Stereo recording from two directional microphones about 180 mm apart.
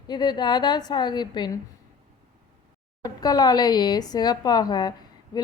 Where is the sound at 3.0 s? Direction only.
20° left (ahead or behind).